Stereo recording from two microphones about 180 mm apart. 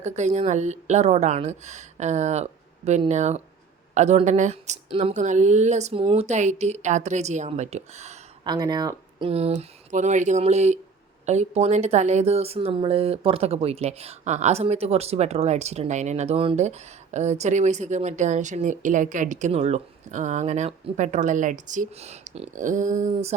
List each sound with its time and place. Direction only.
0.0 s speech: 40° right (ahead or behind)
8.4 s speech: 20° right (ahead or behind); by 23.3 s 45° right (ahead or behind)